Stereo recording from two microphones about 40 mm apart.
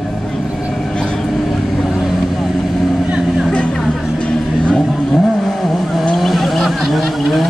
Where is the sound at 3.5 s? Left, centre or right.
Left.